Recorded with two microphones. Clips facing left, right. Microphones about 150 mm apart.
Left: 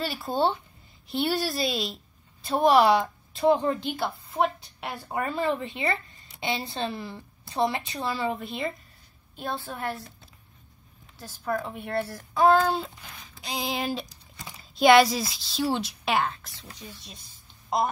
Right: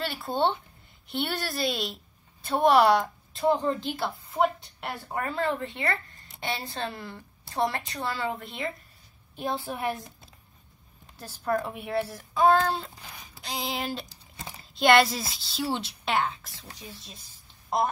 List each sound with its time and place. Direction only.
0.0 s a woman's voice: 5° left (ahead or behind)
9.4 s a woman's voice: 10° right (ahead or behind)
11.4 s a woman's voice: 5° right (ahead or behind)
13.0 s a sound: 10° right (ahead or behind)
13.4 s a woman's voice: centre (ahead or behind)
14.0 s crumpling: 25° right (ahead or behind)
14.6 s a woman's voice: centre (ahead or behind)